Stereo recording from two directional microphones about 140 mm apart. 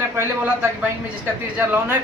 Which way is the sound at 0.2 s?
10° right (ahead or behind).